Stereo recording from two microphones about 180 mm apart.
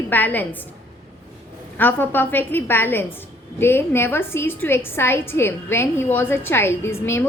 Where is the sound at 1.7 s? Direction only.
10° left (ahead or behind).